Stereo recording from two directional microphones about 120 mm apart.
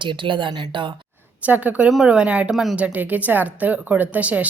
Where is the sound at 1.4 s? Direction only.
15° right (ahead or behind).